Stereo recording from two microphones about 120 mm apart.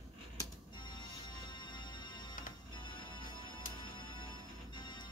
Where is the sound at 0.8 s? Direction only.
40° left (ahead or behind).